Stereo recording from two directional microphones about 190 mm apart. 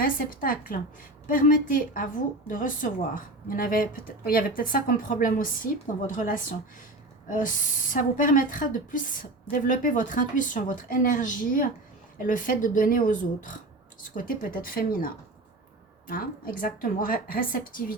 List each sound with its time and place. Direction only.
0.0 s a woman's voice: 45° left (ahead or behind)